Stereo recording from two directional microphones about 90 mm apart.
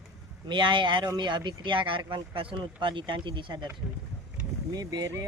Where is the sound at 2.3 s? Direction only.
90° right; by 3.6 s 60° right (ahead or behind).